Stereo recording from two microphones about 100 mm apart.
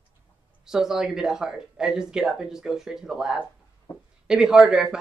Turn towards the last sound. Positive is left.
turn(degrees=-5)  # may be behind; listen again after turning